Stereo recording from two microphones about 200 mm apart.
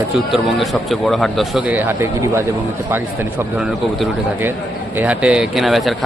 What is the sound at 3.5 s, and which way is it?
Speech, 5° right (ahead or behind).